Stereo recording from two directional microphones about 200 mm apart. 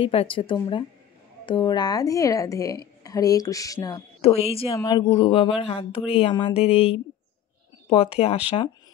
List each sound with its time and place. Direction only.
0.0 s speech: 25° left (ahead or behind)
4.2 s speech: 30° left (ahead or behind)